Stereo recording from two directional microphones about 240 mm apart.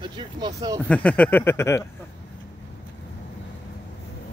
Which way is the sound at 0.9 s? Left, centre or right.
Centre.